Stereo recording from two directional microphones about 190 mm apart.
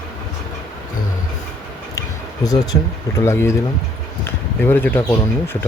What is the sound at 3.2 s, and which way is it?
Speech, 15° left (ahead or behind).